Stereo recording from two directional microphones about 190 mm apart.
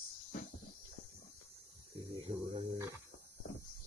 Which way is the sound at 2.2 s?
20° right (ahead or behind).